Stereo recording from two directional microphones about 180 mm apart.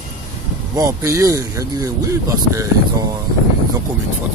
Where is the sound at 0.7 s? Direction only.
15° right (ahead or behind).